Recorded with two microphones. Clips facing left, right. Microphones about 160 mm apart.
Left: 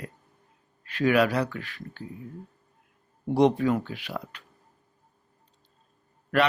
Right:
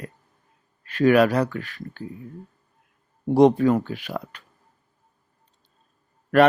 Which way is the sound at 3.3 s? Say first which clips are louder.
Right 5 dB; 45° right (ahead or behind).